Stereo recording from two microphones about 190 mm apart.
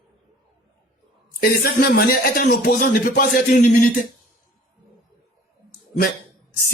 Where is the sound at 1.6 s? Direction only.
50° left (ahead or behind).